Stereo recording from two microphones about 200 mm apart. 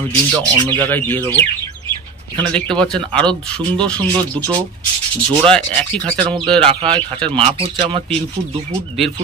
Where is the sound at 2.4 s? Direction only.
5° left (ahead or behind).